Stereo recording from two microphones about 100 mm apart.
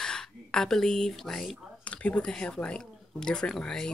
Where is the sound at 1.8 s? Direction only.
15° left (ahead or behind).